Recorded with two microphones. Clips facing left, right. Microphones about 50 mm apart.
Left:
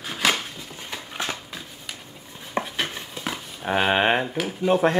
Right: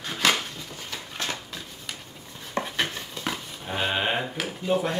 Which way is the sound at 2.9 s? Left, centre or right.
Centre.